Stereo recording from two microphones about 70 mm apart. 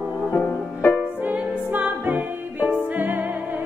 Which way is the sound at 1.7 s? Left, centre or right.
Right.